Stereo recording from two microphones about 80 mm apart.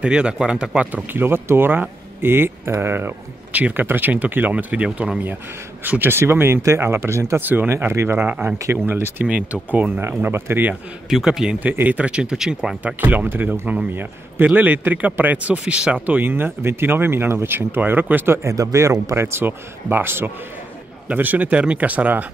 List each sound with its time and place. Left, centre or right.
0.0 s speech: centre; by 9.3 s right
9.3 s speech: centre
11.1 s a man's voice: centre
11.6 s speech: right
13.0 s speech: right